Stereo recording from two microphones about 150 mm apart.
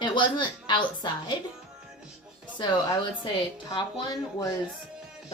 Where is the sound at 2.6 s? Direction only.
30° left (ahead or behind).